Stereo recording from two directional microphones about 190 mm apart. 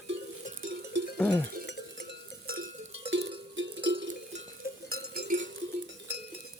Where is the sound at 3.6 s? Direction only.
85° right.